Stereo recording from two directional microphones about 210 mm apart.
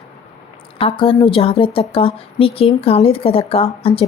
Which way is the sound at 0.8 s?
25° left (ahead or behind).